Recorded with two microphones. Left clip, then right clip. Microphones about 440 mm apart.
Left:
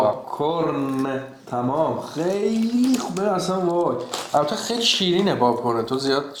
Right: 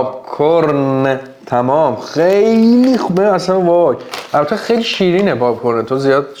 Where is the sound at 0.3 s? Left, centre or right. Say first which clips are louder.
Right 11 dB; right.